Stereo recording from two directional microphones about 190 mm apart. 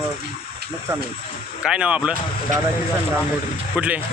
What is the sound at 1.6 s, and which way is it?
Speech, 5° right (ahead or behind).